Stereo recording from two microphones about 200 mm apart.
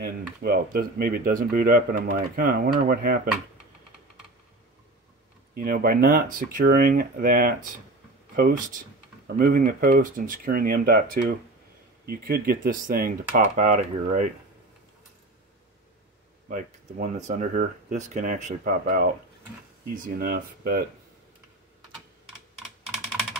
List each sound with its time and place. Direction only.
0.0 s speech: 50° right (ahead or behind)
5.5 s speech: 45° right (ahead or behind)
16.4 s speech: 40° right (ahead or behind)